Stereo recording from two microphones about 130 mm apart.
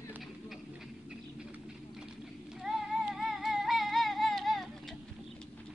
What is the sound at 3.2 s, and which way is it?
Music, centre (ahead or behind).